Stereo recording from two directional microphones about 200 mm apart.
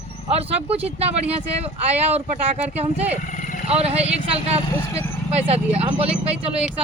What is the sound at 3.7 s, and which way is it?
Speech, 30° right (ahead or behind).